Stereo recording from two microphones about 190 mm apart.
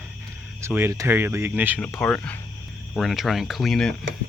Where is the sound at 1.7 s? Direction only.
5° left (ahead or behind).